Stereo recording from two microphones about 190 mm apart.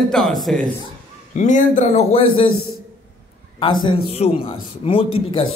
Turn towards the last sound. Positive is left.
turn(degrees=30)  # may be behind; listen again after turning